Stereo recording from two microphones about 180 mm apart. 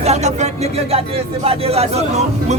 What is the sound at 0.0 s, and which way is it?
Speech, 40° right (ahead or behind).